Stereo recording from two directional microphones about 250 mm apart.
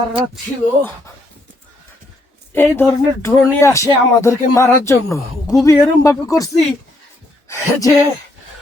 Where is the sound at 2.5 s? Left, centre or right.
Centre.